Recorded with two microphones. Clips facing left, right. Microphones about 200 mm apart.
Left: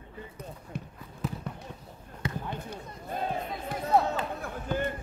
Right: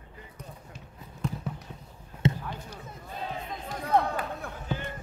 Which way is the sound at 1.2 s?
5° left (ahead or behind).